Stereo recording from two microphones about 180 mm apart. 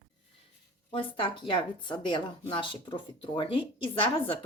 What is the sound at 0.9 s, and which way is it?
A woman's voice, 30° left (ahead or behind).